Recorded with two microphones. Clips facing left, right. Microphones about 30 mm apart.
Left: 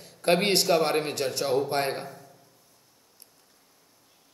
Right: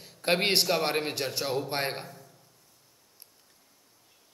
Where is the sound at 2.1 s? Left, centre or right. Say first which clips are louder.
Left 4 dB; centre.